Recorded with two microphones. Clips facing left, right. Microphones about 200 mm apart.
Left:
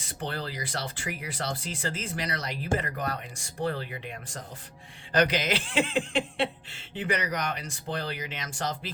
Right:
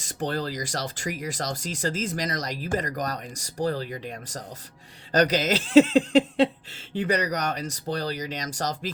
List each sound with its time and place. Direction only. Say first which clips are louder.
0.0 s speech: right 6 dB; 45° right (ahead or behind)